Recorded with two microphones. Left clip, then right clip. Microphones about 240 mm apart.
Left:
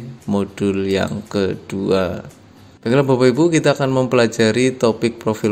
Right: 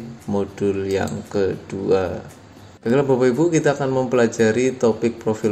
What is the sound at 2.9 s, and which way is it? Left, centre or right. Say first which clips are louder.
Speech: left 3 dB; left.